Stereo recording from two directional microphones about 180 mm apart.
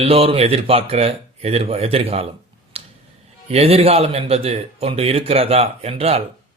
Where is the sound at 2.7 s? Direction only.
35° right (ahead or behind).